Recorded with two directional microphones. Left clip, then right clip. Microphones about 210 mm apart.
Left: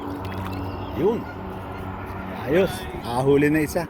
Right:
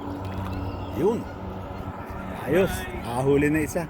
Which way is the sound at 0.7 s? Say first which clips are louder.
Left 2 dB; 40° right (ahead or behind).